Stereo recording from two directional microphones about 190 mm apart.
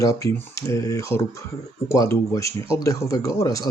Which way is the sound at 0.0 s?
15° left (ahead or behind).